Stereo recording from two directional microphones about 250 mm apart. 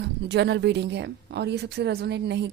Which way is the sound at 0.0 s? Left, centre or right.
Right.